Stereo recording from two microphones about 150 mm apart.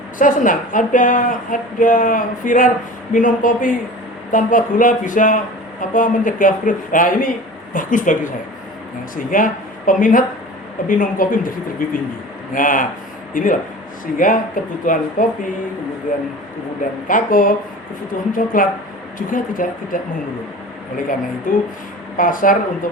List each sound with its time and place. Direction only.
0.2 s a woman's voice: 60° left (ahead or behind)
17.1 s a woman's voice: 65° left (ahead or behind)
21.5 s a woman's voice: 65° left (ahead or behind)